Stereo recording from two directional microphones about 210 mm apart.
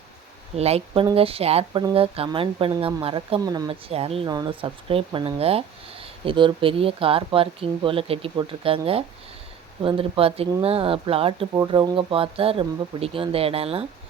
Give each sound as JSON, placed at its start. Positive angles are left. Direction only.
{"t": 0.5, "sound": "speech", "side_deg": -30}